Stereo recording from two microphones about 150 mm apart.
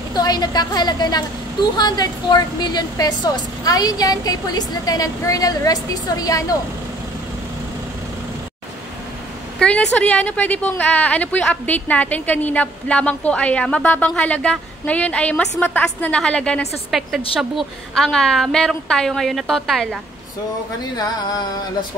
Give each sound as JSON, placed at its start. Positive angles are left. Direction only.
{"t": 0.1, "sound": "a woman's voice", "side_deg": 25}
{"t": 9.6, "sound": "a woman's voice", "side_deg": 5}